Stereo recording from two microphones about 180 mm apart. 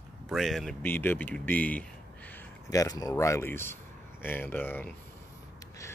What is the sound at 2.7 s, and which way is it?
Speech, 20° left (ahead or behind).